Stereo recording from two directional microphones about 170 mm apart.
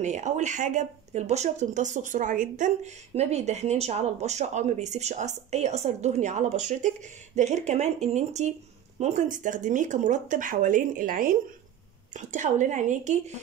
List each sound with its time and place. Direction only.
0.0 s speech: 45° right (ahead or behind)